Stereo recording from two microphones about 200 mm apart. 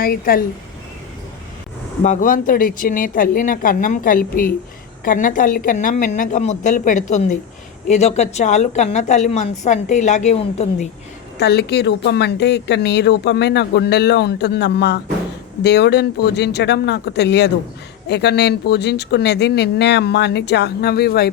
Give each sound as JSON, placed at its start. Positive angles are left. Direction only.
{"t": 0.0, "sound": "speech", "side_deg": 45}
{"t": 2.0, "sound": "a woman's voice", "side_deg": 40}
{"t": 11.3, "sound": "speech", "side_deg": 55}